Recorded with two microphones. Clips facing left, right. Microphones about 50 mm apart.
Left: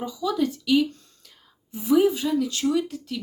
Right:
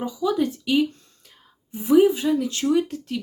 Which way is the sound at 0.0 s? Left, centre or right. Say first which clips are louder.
Right 2 dB; right.